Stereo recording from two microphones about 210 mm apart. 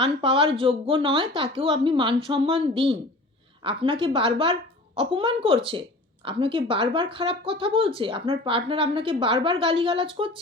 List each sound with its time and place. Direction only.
0.0 s speech: 25° right (ahead or behind)